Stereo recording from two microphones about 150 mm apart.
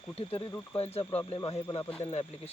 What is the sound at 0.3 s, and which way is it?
Speech, 15° left (ahead or behind).